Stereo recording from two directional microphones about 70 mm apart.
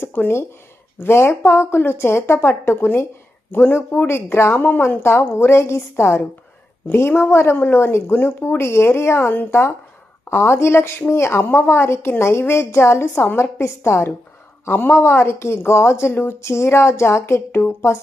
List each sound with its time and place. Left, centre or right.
0.0 s a woman's voice: left